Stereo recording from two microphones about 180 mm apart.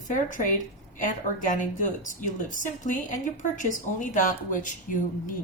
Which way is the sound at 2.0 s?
45° left (ahead or behind).